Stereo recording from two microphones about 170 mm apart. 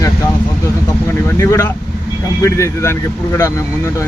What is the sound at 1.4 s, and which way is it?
Speech, 20° left (ahead or behind).